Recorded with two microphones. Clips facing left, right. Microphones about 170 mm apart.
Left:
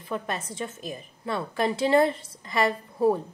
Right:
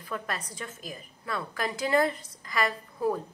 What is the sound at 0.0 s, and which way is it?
A woman's voice, 25° left (ahead or behind).